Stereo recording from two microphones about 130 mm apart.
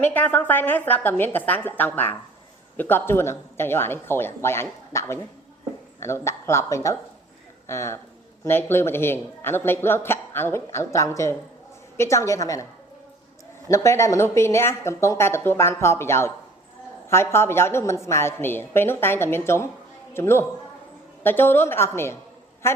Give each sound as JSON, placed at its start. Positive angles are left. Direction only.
{"t": 0.0, "sound": "a woman's voice", "side_deg": 15}
{"t": 13.7, "sound": "a man's voice", "side_deg": 25}